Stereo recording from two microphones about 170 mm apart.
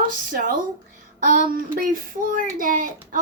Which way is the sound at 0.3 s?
55° right (ahead or behind).